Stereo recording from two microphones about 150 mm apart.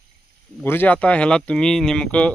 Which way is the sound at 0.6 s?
15° left (ahead or behind).